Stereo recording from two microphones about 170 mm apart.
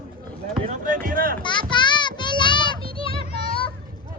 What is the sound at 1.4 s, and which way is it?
Speech, 25° left (ahead or behind).